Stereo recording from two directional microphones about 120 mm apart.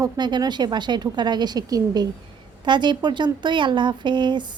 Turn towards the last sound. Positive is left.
turn(degrees=-40)  # may be behind; listen again after turning